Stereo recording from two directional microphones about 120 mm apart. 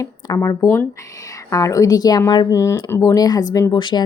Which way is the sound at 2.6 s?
20° left (ahead or behind).